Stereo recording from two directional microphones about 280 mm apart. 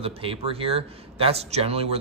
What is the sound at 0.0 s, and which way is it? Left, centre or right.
Speech, centre.